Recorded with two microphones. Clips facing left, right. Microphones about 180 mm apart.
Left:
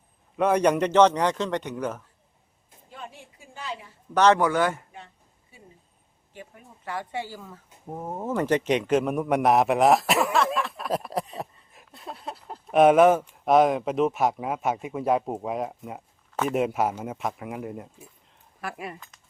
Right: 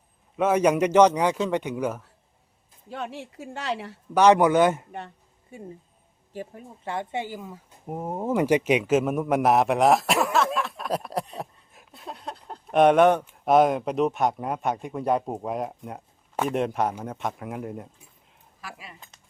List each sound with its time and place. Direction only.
0.3 s a man's voice: 5° right (ahead or behind)
2.9 s speech: 75° right (ahead or behind)
4.1 s a man's voice: 15° right (ahead or behind)
4.9 s a sound: 65° right (ahead or behind)
6.3 s speech: 35° right (ahead or behind); by 17.9 s centre (ahead or behind)
18.6 s speech: 55° left (ahead or behind)